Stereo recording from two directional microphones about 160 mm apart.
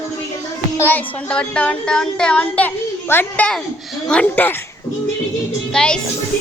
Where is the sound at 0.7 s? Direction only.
10° left (ahead or behind).